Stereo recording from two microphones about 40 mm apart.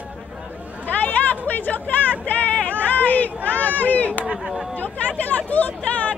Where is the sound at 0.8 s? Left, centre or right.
Left.